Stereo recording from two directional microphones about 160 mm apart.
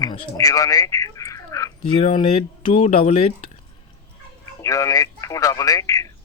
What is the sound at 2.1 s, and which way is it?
Speech, 35° left (ahead or behind).